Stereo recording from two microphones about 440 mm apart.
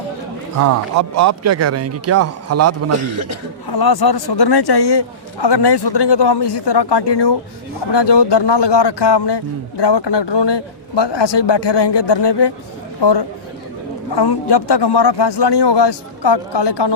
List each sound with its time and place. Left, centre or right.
0.6 s a man's voice: right
3.7 s a man's voice: left